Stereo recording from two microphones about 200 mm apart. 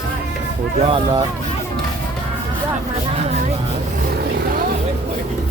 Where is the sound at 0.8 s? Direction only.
25° right (ahead or behind).